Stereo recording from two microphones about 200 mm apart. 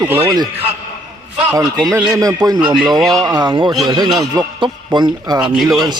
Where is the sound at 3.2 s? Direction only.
20° right (ahead or behind).